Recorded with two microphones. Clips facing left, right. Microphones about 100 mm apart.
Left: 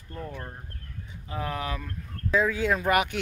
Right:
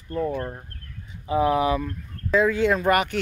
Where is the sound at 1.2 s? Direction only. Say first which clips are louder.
Right 12 dB; 10° right (ahead or behind).